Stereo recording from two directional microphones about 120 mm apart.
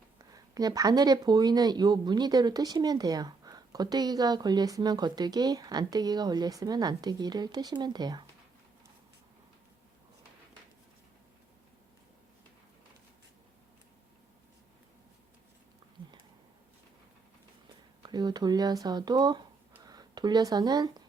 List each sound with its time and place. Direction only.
0.5 s speech: 30° right (ahead or behind)
16.0 s a sound: 10° right (ahead or behind)
18.0 s speech: 35° right (ahead or behind)